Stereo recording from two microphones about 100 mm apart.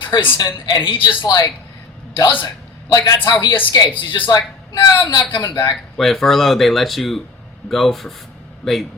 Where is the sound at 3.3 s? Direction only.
45° left (ahead or behind).